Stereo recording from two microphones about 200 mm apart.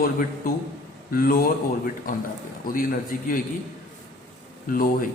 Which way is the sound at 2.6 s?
45° left (ahead or behind).